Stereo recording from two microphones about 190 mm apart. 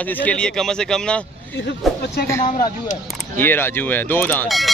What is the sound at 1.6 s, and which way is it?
Speech, 60° left (ahead or behind).